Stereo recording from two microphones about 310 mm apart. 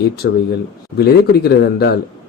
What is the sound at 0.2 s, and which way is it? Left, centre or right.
Speech, left.